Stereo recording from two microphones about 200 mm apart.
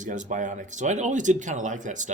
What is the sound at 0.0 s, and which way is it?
Speech, 40° right (ahead or behind).